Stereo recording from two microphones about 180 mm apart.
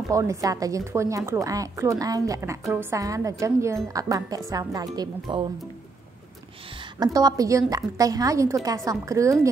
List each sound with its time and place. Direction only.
0.1 s a woman's voice: 20° right (ahead or behind)
6.8 s a woman's voice: 20° right (ahead or behind)